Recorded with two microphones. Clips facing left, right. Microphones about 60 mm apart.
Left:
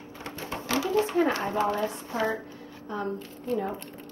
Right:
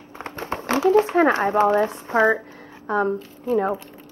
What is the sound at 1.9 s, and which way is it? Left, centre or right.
Speech, right.